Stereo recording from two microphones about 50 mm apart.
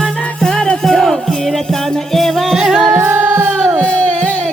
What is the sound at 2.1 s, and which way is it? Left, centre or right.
Music, centre.